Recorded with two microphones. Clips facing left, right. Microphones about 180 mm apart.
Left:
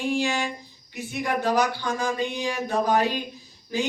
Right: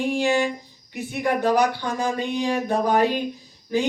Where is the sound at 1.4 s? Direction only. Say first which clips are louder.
Right 2 dB; 55° right (ahead or behind).